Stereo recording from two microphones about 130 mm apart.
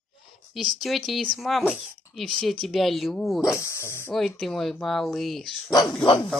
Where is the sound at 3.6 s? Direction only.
20° left (ahead or behind).